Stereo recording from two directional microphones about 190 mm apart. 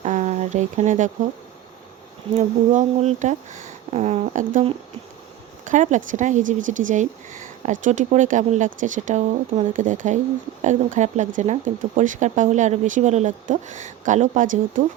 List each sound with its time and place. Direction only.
0.0 s a sound: 40° right (ahead or behind)
2.7 s speech: 40° right (ahead or behind)
5.6 s speech: 40° right (ahead or behind)